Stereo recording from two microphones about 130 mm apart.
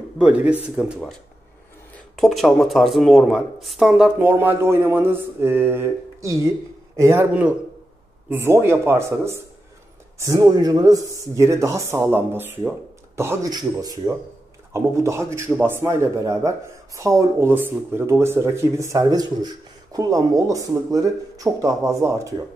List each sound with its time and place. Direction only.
0.2 s speech: 10° right (ahead or behind)
2.1 s speech: centre (ahead or behind)
4.2 s speech: 15° right (ahead or behind)
13.5 s speech: 30° right (ahead or behind)